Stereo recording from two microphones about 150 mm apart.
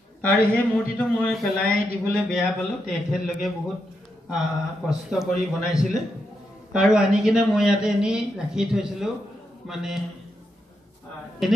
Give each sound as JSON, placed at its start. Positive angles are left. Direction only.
{"t": 0.2, "sound": "a man's voice", "side_deg": 10}
{"t": 4.8, "sound": "a man's voice", "side_deg": -5}
{"t": 11.4, "sound": "a man's voice", "side_deg": 0}